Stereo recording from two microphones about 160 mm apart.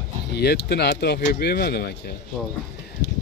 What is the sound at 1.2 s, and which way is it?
Speech, 70° left (ahead or behind).